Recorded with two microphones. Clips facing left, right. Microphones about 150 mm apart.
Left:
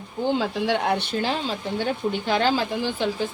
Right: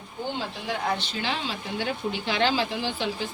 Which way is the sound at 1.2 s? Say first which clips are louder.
Left 5 dB; 40° left (ahead or behind).